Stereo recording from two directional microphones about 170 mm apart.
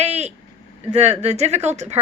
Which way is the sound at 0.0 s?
40° right (ahead or behind).